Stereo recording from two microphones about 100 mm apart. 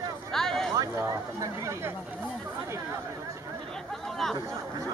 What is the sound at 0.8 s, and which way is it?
Speech, 35° right (ahead or behind).